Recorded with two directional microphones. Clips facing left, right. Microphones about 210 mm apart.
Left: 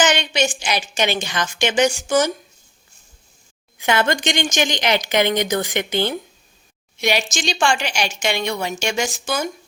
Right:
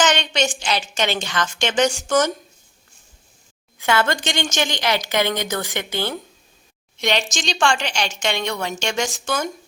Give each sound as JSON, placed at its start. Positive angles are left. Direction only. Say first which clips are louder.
{"t": 0.0, "sound": "a woman's voice", "louder": "left 1 dB", "side_deg": 10}
{"t": 3.8, "sound": "a woman's voice", "louder": "left 1 dB", "side_deg": 15}
{"t": 7.0, "sound": "a woman's voice", "louder": "left 1 dB", "side_deg": 10}